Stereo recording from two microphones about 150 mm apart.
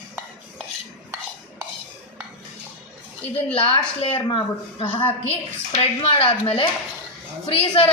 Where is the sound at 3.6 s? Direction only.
40° left (ahead or behind).